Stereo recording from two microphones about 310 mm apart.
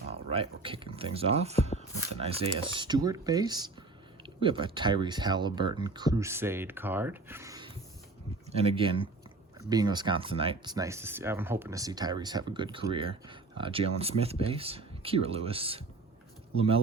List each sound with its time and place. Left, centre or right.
0.3 s speech: centre